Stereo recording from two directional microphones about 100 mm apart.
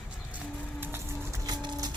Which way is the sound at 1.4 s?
45° right (ahead or behind).